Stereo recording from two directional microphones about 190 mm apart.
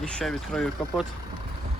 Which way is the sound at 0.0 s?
5° left (ahead or behind).